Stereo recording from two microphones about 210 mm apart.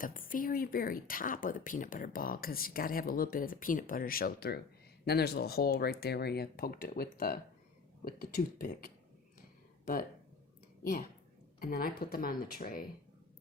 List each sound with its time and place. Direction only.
0.0 s speech: 40° left (ahead or behind)
11.6 s speech: 45° left (ahead or behind)